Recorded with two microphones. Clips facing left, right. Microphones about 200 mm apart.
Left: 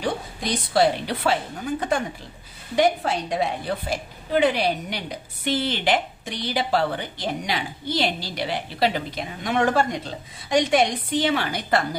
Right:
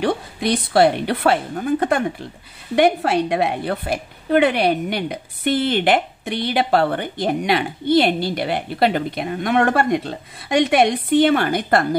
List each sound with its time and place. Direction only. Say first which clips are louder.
0.0 s a woman's voice: right 6 dB; 65° right (ahead or behind)